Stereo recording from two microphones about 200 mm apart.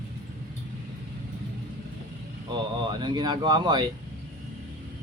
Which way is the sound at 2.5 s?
20° right (ahead or behind).